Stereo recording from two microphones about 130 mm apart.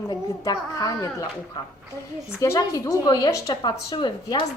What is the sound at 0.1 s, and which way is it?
A woman's voice, 25° left (ahead or behind).